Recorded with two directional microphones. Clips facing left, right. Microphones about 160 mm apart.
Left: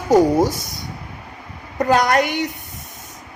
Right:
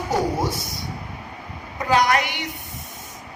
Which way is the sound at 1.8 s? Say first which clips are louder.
Left 4 dB; 45° left (ahead or behind).